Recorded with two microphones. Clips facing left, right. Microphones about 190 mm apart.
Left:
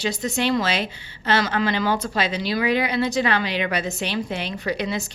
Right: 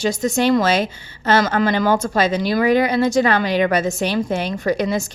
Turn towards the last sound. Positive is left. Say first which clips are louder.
# right 6 dB
turn(degrees=-45)  # may be behind; listen again after turning